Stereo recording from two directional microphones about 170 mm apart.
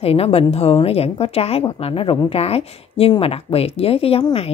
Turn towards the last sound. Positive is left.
turn(degrees=30)  # may be behind; listen again after turning